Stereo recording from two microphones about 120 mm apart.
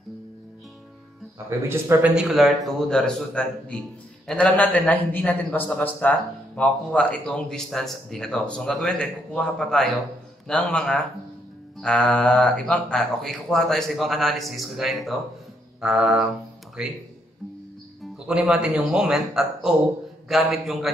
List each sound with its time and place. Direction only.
1.6 s speech: 20° right (ahead or behind)
2.1 s a man's voice: 5° right (ahead or behind)
18.0 s speech: 5° right (ahead or behind)